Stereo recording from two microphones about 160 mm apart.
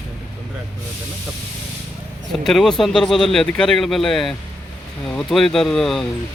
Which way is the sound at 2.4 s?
Centre (ahead or behind).